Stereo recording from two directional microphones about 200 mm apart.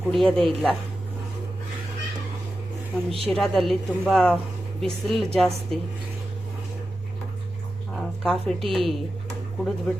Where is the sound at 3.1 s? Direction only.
30° right (ahead or behind).